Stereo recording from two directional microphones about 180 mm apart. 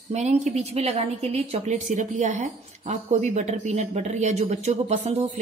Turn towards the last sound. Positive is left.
turn(degrees=-35)  # may be behind; listen again after turning